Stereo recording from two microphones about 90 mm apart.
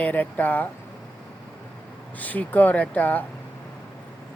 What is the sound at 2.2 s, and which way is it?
Speech, 20° left (ahead or behind).